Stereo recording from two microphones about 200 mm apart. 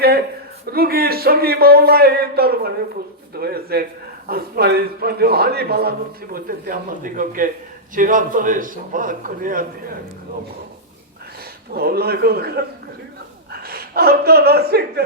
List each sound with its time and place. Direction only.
0.7 s a man's voice: 50° right (ahead or behind)
11.7 s a man's voice: 50° right (ahead or behind)